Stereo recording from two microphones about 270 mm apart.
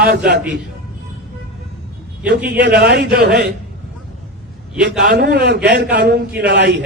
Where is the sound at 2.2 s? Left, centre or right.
Right.